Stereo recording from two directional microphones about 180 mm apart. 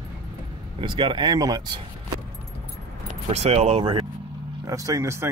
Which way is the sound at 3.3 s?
35° right (ahead or behind).